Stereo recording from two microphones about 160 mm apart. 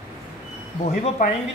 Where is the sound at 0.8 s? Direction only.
40° left (ahead or behind).